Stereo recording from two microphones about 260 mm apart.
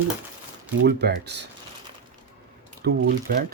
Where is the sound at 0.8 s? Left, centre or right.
Right.